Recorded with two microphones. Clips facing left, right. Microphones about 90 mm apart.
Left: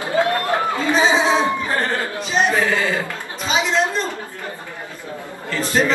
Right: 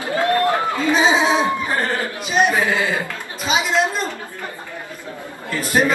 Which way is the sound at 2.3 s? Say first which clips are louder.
Right 1 dB; 15° right (ahead or behind).